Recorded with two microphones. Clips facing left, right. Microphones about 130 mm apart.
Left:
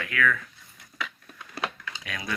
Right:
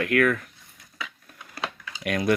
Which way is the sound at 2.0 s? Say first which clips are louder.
Right 13 dB; 65° right (ahead or behind).